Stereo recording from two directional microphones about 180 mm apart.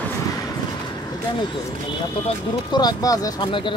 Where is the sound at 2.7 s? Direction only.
20° left (ahead or behind).